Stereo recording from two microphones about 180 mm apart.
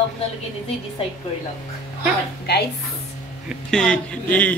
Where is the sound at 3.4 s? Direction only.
5° left (ahead or behind).